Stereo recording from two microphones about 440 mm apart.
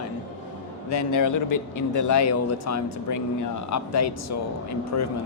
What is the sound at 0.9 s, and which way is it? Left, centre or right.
A man's voice, left.